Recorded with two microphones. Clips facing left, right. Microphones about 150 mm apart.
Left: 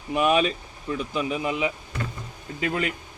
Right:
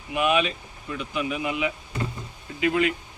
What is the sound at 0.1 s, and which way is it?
Speech, 40° left (ahead or behind).